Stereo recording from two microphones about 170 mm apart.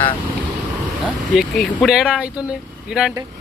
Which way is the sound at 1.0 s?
Centre (ahead or behind).